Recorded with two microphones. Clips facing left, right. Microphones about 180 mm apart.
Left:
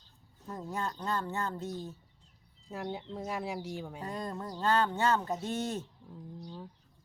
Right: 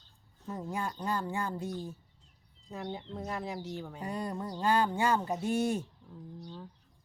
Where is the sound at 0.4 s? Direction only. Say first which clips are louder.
Right 1 dB; 10° right (ahead or behind).